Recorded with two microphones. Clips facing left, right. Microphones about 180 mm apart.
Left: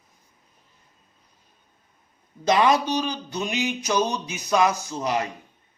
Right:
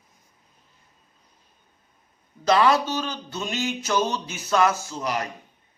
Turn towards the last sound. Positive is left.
turn(degrees=20)  # may be behind; listen again after turning